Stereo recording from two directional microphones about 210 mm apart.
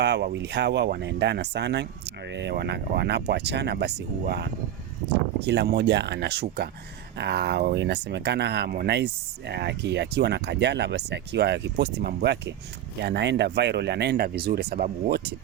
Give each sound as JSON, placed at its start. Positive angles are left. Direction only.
{"t": 0.0, "sound": "speech", "side_deg": -55}
{"t": 5.5, "sound": "speech", "side_deg": -55}